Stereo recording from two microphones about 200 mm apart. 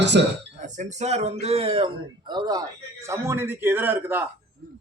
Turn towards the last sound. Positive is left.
turn(degrees=-10)  # may be behind; listen again after turning